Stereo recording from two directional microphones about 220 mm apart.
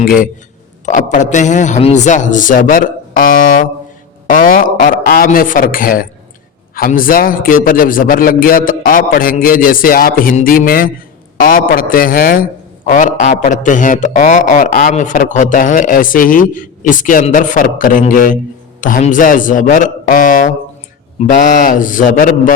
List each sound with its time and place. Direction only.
0.0 s a man's voice: 40° left (ahead or behind)